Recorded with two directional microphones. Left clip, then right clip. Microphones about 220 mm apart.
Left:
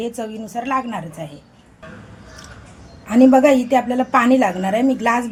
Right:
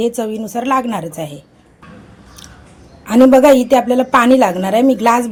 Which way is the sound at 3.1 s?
35° right (ahead or behind).